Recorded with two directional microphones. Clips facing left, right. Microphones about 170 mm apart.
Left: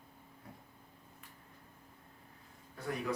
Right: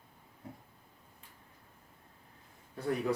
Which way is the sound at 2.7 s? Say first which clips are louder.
Right 6 dB; 35° right (ahead or behind).